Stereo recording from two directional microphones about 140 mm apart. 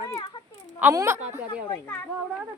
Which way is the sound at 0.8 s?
15° right (ahead or behind).